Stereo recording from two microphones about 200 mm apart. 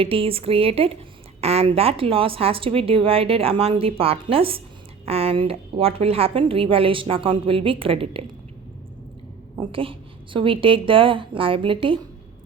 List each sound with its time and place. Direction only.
0.0 s a woman's voice: 30° right (ahead or behind)
9.6 s a woman's voice: 25° right (ahead or behind)